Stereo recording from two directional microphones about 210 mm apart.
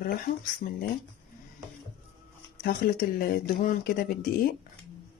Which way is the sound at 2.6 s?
45° left (ahead or behind).